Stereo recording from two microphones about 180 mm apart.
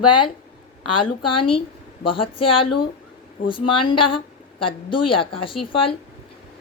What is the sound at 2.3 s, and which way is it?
A woman's voice, 30° left (ahead or behind).